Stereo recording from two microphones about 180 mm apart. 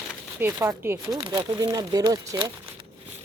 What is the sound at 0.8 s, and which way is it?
Speech, 15° right (ahead or behind).